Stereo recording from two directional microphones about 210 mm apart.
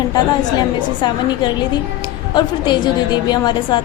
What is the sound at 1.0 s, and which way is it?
A woman's voice, 20° left (ahead or behind).